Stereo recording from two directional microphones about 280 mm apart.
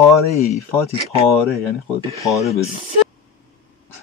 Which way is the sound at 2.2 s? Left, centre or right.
Centre.